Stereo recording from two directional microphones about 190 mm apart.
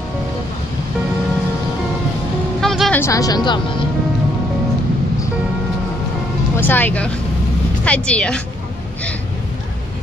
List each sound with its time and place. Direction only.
2.6 s music: centre (ahead or behind)
3.0 s speech: 15° left (ahead or behind)
6.5 s speech: 10° left (ahead or behind)